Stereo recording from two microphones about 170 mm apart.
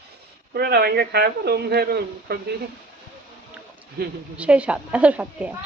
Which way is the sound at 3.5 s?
10° right (ahead or behind).